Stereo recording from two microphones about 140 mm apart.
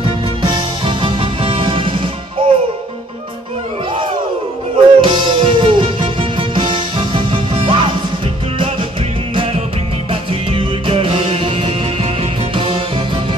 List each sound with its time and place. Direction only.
0.4 s music: 35° right (ahead or behind)
4.7 s music: 35° right (ahead or behind)
9.3 s music: 40° right (ahead or behind)